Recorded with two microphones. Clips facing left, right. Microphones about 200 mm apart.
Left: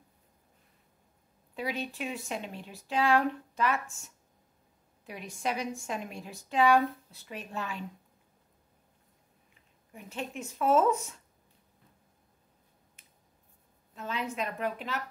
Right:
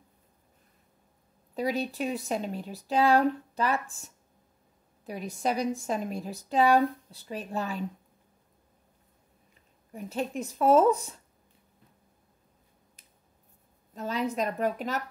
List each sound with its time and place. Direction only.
1.5 s a woman's voice: 40° right (ahead or behind)
9.9 s a woman's voice: 40° right (ahead or behind)
13.9 s a woman's voice: 40° right (ahead or behind)